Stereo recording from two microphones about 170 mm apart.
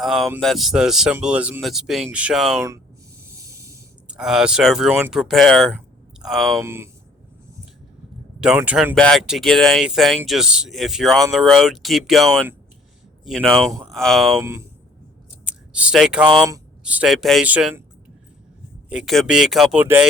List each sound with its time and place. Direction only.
0.0 s speech: centre (ahead or behind)
2.6 s speech: 20° right (ahead or behind)
3.2 s a sound: 15° right (ahead or behind)
4.1 s speech: 5° right (ahead or behind)
6.6 s speech: 15° right (ahead or behind)
8.4 s speech: 5° right (ahead or behind)
14.4 s speech: 15° right (ahead or behind)
15.7 s speech: 5° right (ahead or behind)
18.9 s speech: 5° right (ahead or behind)